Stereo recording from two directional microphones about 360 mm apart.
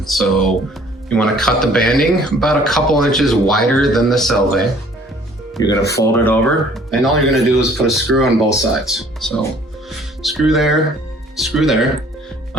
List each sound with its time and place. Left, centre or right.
0.0 s speech: centre